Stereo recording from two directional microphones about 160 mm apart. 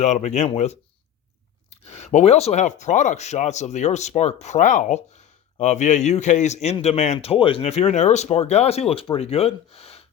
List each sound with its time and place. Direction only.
0.0 s a man's voice: 45° left (ahead or behind)